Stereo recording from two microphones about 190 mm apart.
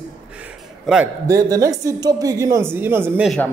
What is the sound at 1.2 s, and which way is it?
A man's voice, 20° right (ahead or behind).